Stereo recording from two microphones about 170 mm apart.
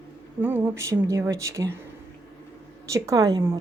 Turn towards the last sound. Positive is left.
turn(degrees=-20)  # may be behind; listen again after turning